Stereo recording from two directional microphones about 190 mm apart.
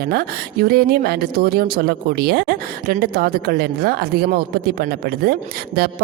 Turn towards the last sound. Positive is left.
turn(degrees=-55)  # may be behind; listen again after turning